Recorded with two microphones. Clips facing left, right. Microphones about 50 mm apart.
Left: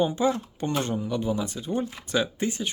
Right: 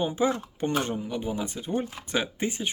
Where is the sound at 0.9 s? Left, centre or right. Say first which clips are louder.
Left 3 dB; centre.